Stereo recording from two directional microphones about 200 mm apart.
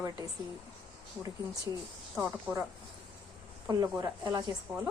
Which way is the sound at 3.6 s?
20° right (ahead or behind).